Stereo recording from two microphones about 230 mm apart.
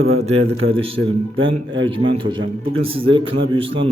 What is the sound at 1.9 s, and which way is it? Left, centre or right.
A man's voice, right.